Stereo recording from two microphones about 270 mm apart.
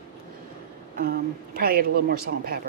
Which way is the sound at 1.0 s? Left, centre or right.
Right.